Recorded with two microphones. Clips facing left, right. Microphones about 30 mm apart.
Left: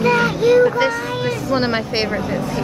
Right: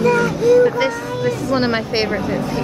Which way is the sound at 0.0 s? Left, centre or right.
Left.